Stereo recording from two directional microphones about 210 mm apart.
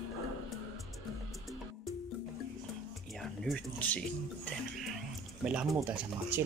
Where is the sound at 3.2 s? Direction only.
Centre (ahead or behind).